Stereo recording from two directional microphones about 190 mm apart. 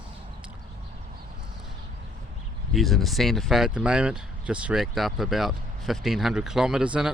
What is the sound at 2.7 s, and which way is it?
Speech, centre (ahead or behind).